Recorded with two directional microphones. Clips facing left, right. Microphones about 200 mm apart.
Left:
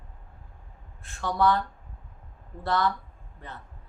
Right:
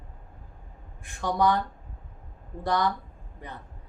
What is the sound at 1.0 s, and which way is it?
Speech, 15° right (ahead or behind).